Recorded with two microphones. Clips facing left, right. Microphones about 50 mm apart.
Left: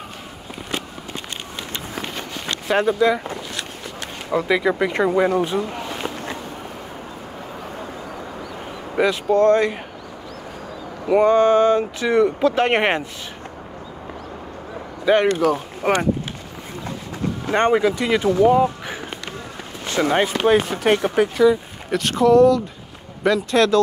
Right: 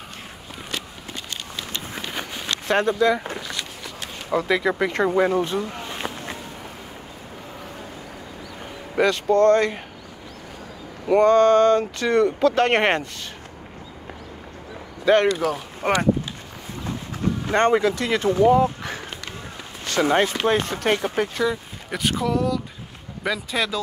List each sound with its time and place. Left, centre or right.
2.7 s speech: centre
4.3 s speech: centre
5.5 s speech: left
8.9 s speech: centre
11.1 s speech: centre
15.1 s speech: centre
17.5 s speech: centre
20.0 s speech: centre